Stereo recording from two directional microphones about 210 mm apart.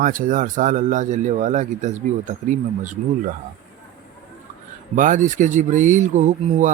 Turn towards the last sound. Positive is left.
turn(degrees=-35)  # may be behind; listen again after turning